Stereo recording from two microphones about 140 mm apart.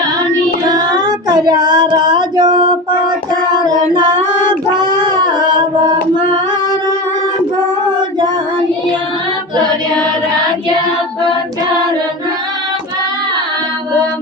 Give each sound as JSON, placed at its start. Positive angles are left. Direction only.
{"t": 0.7, "sound": "child singing", "side_deg": -30}
{"t": 3.6, "sound": "singing", "side_deg": -30}
{"t": 4.7, "sound": "cat", "side_deg": -35}